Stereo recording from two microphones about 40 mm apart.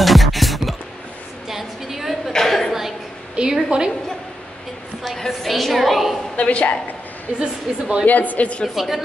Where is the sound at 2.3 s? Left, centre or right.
Centre.